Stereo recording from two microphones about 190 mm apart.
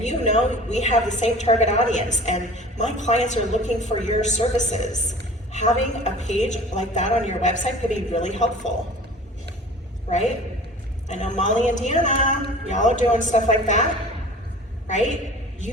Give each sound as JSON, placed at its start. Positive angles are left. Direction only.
{"t": 0.0, "sound": "a woman's voice", "side_deg": 40}
{"t": 10.1, "sound": "a woman's voice", "side_deg": 35}
{"t": 14.8, "sound": "a woman's voice", "side_deg": 40}